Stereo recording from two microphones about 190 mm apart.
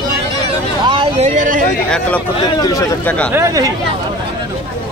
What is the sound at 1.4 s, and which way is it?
Speech, 45° right (ahead or behind).